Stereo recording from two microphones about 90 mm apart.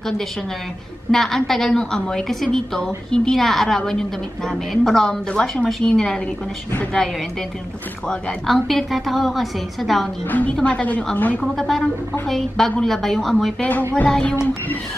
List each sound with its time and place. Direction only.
1.1 s a woman's voice: 5° left (ahead or behind)
8.1 s a woman's voice: 10° left (ahead or behind)
10.5 s a woman's voice: 15° left (ahead or behind)
11.5 s a woman's voice: 5° left (ahead or behind)
13.6 s a woman's voice: 20° left (ahead or behind)